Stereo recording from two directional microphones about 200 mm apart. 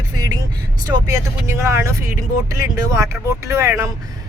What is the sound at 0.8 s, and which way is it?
Speech, 15° right (ahead or behind).